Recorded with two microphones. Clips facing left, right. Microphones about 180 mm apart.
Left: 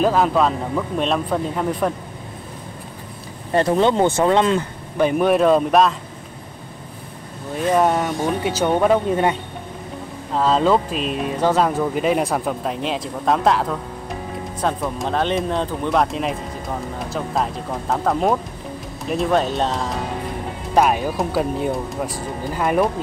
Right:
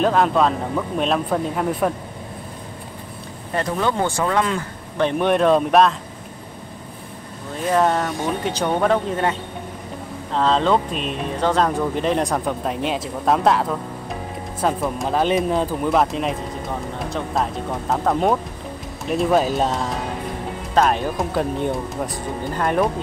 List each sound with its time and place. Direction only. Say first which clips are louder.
0.0 s speech: even; centre (ahead or behind)
3.5 s speech: left 5 dB; 25° left (ahead or behind)
4.9 s speech: left 2 dB; 5° left (ahead or behind)
7.7 s speech: left 1 dB; 5° left (ahead or behind)
20.7 s speech: left 1 dB; 10° left (ahead or behind)